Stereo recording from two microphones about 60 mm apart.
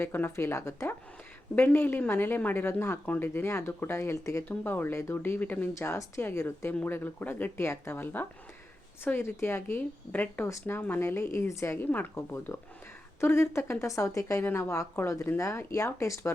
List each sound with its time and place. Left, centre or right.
0.0 s speech: left
1.5 s speech: left
4.4 s speech: left
4.9 s speech: left
5.7 s speech: left
6.8 s speech: left
9.1 s speech: left
10.1 s speech: left
10.4 s speech: left
10.8 s speech: left
11.0 s speech: left
11.9 s speech: left
12.5 s a woman's voice: left